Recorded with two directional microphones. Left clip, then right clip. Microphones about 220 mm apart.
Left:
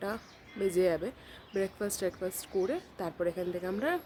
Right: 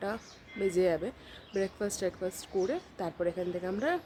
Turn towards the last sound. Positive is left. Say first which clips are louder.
# right 1 dB
turn(degrees=0)  # may be behind; listen again after turning